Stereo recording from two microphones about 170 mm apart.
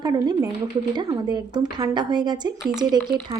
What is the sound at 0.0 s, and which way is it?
A woman's voice, 25° right (ahead or behind).